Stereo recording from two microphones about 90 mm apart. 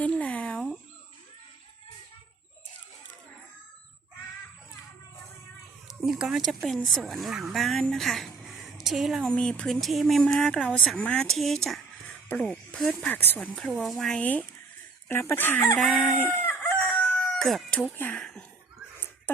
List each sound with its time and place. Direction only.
0.0 s a sound: 15° left (ahead or behind)
6.0 s a woman's voice: 5° right (ahead or behind)
9.3 s speech: 10° left (ahead or behind)
12.0 s music: 20° left (ahead or behind)
12.7 s speech: 10° left (ahead or behind)
13.7 s speech: centre (ahead or behind)
14.2 s speech: 15° left (ahead or behind)
15.1 s speech: 25° left (ahead or behind)
15.8 s speech: 5° left (ahead or behind)
16.1 s chicken: 25° left (ahead or behind)
17.0 s crowing: 10° left (ahead or behind)
17.9 s speech: 20° left (ahead or behind)
18.9 s a sound: 20° left (ahead or behind)